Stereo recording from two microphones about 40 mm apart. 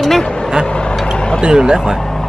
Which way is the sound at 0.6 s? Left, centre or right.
Left.